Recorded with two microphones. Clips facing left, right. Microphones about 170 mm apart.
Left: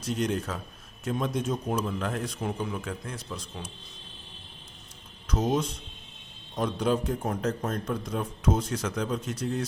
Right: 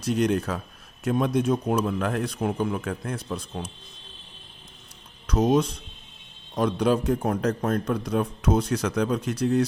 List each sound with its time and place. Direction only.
0.0 s a man's voice: 65° right (ahead or behind)
5.3 s a man's voice: 70° right (ahead or behind)